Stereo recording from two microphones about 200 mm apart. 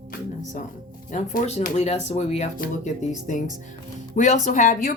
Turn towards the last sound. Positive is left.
turn(degrees=40)  # may be behind; listen again after turning